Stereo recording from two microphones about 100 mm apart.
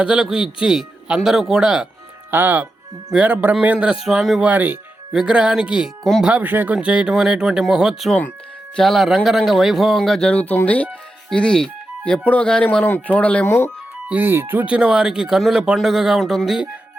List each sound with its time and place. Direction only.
0.0 s speech: 10° right (ahead or behind)
2.3 s speech: 20° right (ahead or behind)
4.4 s speech: 20° right (ahead or behind); by 13.4 s 15° left (ahead or behind)
13.4 s speech: 25° left (ahead or behind)
14.1 s speech: 20° right (ahead or behind); by 16.6 s 5° right (ahead or behind)